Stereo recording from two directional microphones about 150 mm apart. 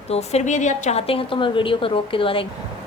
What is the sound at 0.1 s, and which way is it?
A woman's voice, 45° left (ahead or behind).